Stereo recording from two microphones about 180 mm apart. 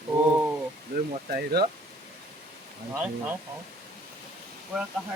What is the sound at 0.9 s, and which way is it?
Speech, 60° right (ahead or behind).